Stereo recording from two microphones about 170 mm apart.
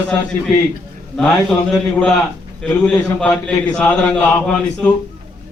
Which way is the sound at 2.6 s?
10° left (ahead or behind).